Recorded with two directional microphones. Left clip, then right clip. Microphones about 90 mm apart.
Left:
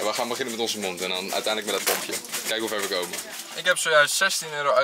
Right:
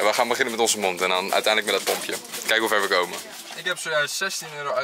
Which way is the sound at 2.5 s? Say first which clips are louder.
Right 7 dB; 30° right (ahead or behind).